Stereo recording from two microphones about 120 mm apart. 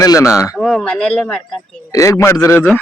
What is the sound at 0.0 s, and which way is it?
Speech, 30° left (ahead or behind).